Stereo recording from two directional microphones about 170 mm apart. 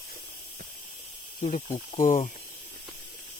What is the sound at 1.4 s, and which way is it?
Speech, 40° left (ahead or behind).